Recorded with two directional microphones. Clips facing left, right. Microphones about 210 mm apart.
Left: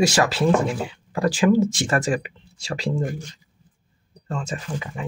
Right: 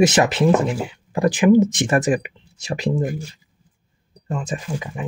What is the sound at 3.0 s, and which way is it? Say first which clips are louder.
Speech: right 3 dB; 5° right (ahead or behind).